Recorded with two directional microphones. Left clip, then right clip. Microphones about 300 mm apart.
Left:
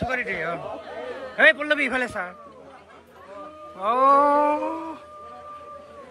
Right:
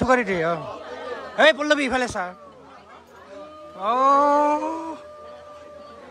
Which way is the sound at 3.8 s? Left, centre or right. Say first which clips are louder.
Even; centre.